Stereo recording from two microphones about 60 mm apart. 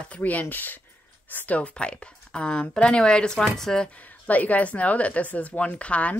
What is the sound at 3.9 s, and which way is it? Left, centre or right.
Speech, left.